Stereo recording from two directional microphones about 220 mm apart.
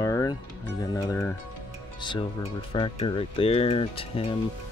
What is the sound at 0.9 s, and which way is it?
Speech, 10° left (ahead or behind).